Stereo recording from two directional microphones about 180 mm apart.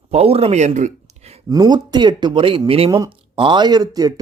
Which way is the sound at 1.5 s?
20° right (ahead or behind).